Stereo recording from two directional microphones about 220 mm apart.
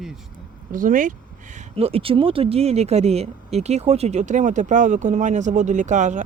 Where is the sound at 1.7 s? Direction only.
25° right (ahead or behind).